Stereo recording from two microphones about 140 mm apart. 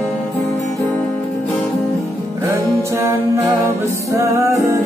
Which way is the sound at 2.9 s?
20° right (ahead or behind).